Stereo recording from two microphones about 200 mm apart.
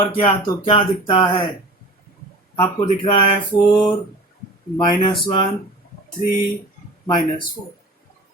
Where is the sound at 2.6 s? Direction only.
25° left (ahead or behind).